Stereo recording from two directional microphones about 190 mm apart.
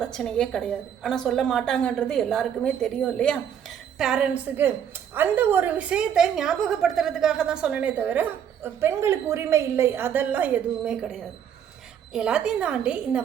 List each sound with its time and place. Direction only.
0.0 s a woman's voice: 5° left (ahead or behind)